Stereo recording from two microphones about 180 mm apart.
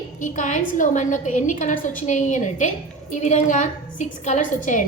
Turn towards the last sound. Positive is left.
turn(degrees=45)  # may be behind; listen again after turning